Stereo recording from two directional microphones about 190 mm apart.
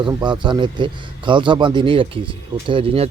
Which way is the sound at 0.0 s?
25° right (ahead or behind).